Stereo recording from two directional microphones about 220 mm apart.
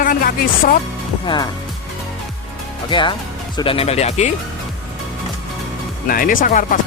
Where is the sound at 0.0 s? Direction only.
40° left (ahead or behind).